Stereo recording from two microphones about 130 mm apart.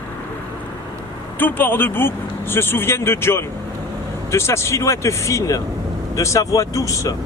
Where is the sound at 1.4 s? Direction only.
15° left (ahead or behind).